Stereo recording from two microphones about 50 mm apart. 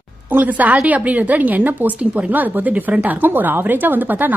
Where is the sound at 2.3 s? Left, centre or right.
Right.